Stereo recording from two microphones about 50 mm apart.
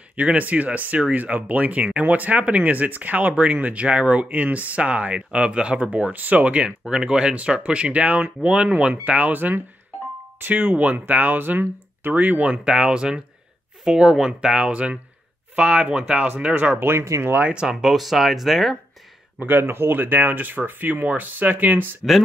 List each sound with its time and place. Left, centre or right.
0.1 s speech: right
10.7 s speech: right
12.6 s speech: centre
14.7 s speech: right
16.8 s speech: right
17.4 s speech: right
17.6 s speech: centre
17.9 s speech: centre
19.4 s speech: right